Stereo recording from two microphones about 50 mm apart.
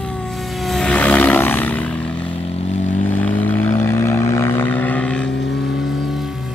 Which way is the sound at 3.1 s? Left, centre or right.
Left.